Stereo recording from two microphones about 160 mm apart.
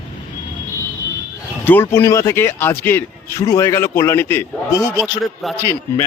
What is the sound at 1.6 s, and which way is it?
A man's voice, 10° left (ahead or behind).